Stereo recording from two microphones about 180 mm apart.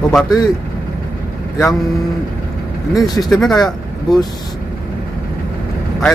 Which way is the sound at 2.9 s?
20° left (ahead or behind).